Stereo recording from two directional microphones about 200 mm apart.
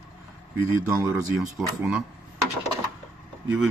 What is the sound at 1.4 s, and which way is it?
Speech, centre (ahead or behind).